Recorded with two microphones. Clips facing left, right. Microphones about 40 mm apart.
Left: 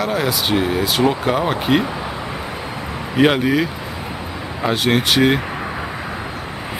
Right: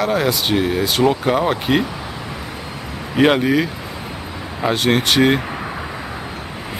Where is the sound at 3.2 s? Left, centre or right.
Centre.